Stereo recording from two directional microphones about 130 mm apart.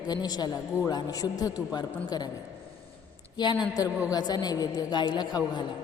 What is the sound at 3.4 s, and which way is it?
A woman's voice, 35° left (ahead or behind).